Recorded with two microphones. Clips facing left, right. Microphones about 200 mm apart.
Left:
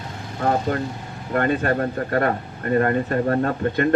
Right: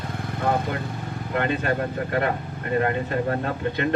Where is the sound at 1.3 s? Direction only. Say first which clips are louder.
Left 4 dB; 45° left (ahead or behind).